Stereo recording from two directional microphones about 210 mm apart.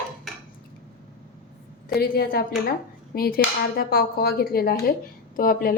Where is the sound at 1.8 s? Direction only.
45° left (ahead or behind).